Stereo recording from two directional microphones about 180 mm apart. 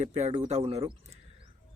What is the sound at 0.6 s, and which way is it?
Speech, 25° right (ahead or behind).